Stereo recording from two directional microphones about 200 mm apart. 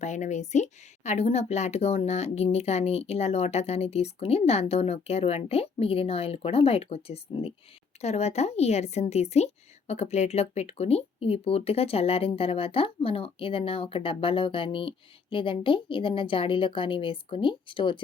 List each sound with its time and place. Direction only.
0.0 s a woman's voice: 35° left (ahead or behind)